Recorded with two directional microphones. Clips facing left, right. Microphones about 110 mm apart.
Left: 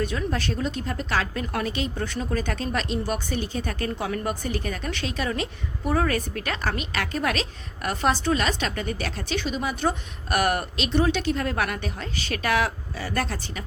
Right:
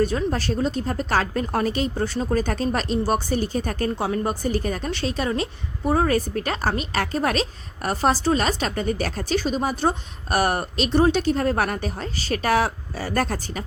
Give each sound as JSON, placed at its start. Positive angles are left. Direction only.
{"t": 0.0, "sound": "speech", "side_deg": -35}